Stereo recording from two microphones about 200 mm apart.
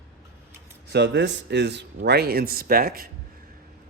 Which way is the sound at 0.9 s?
60° right (ahead or behind).